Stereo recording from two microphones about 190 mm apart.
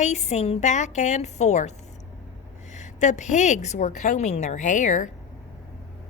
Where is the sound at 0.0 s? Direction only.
35° left (ahead or behind).